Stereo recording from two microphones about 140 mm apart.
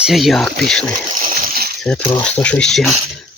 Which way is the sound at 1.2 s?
90° right.